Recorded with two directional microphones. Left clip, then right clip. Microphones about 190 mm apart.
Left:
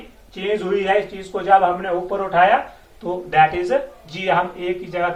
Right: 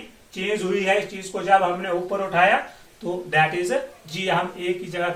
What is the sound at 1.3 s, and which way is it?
A man's voice, 15° right (ahead or behind).